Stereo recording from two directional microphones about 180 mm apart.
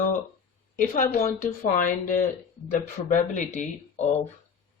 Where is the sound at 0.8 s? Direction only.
45° left (ahead or behind).